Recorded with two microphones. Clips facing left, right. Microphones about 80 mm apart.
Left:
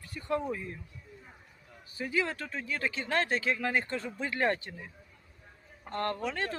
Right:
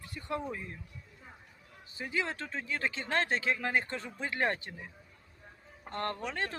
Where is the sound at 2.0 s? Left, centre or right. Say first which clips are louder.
Left 3 dB; right.